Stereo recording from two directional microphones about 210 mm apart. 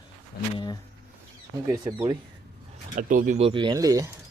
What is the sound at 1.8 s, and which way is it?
Speech, 15° right (ahead or behind).